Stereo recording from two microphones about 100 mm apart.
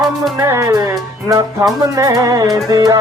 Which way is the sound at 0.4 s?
30° right (ahead or behind).